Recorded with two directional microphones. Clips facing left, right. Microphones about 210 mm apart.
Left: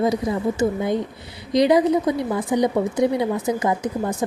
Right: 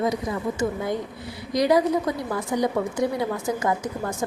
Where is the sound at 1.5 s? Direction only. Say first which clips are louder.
Left 4 dB; 20° left (ahead or behind).